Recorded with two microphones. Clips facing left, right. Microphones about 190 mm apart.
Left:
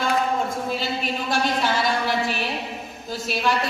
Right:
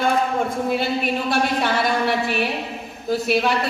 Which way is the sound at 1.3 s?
60° right (ahead or behind).